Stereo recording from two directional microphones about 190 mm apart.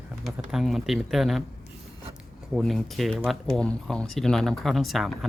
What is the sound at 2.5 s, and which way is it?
Speech, centre (ahead or behind).